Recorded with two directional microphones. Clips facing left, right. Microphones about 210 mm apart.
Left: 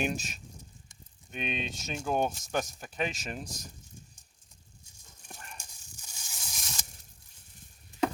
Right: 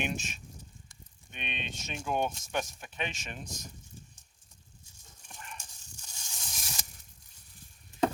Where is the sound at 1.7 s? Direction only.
35° left (ahead or behind).